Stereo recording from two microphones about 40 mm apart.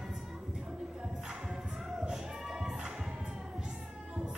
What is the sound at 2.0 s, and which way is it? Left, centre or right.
Music, centre.